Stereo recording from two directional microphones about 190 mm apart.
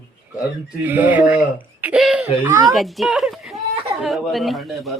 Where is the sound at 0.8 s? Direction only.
10° right (ahead or behind).